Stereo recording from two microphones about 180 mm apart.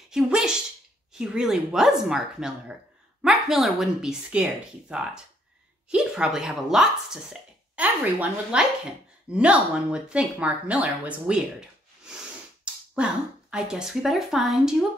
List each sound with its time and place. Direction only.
0.1 s speech: 5° right (ahead or behind)
12.9 s speech: 5° right (ahead or behind)